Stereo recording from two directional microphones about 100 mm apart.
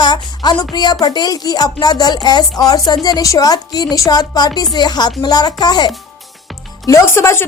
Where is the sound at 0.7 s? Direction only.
45° left (ahead or behind).